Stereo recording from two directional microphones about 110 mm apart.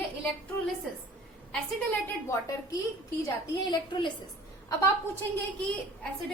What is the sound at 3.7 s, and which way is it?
Speech, 45° left (ahead or behind).